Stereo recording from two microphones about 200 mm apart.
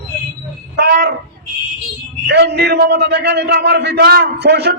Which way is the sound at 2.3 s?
55° right (ahead or behind).